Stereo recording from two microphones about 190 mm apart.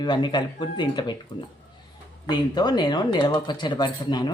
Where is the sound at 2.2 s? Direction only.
20° left (ahead or behind).